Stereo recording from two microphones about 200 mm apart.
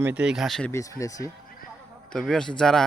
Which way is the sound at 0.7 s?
15° left (ahead or behind).